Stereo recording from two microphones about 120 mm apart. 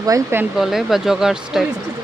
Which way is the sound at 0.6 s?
5° right (ahead or behind).